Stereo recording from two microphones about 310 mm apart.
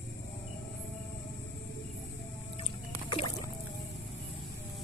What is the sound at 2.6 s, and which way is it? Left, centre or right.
Boat, centre.